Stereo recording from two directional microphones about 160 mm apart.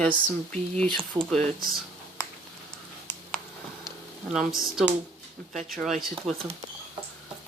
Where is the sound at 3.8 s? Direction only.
Centre (ahead or behind).